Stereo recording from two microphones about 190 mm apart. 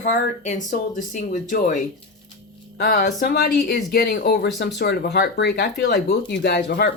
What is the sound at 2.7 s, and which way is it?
Speech, 55° left (ahead or behind).